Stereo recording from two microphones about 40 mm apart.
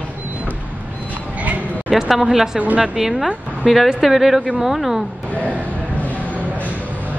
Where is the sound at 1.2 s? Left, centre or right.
Right.